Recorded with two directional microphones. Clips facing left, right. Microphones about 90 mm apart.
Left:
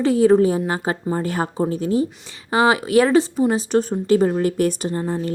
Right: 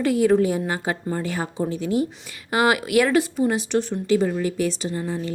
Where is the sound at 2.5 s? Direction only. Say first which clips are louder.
Left 3 dB; 30° left (ahead or behind); by 5.0 s 50° left (ahead or behind).